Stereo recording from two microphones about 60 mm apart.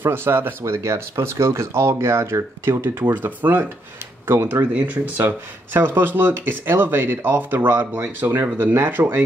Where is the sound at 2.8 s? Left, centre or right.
Right.